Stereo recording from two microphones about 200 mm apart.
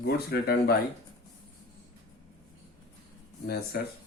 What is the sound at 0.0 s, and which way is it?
Speech, 50° left (ahead or behind).